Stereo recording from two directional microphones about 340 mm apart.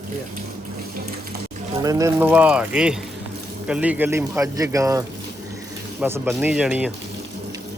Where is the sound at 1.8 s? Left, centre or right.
Centre.